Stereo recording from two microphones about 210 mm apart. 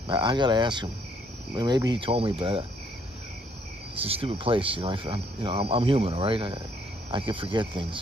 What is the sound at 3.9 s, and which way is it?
Speech, 25° right (ahead or behind).